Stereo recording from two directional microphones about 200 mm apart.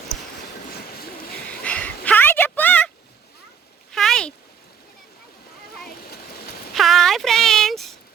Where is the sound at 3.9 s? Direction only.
Centre (ahead or behind).